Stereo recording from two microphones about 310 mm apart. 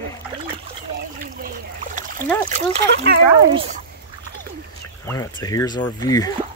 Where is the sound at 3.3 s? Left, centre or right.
Centre.